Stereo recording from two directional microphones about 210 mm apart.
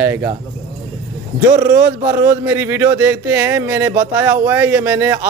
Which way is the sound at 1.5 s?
15° right (ahead or behind).